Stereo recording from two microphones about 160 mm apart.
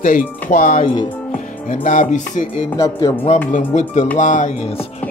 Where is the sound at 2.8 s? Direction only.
20° left (ahead or behind).